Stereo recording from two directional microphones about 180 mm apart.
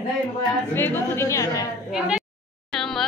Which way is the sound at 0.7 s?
10° left (ahead or behind).